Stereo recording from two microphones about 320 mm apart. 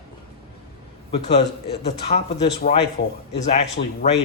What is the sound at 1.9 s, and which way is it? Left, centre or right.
Speech, centre.